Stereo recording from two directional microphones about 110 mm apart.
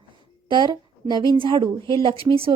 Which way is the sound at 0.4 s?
45° right (ahead or behind).